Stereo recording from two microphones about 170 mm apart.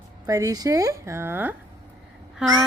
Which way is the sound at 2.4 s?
5° right (ahead or behind).